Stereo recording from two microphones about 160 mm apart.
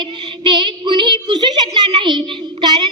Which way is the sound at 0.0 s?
30° right (ahead or behind).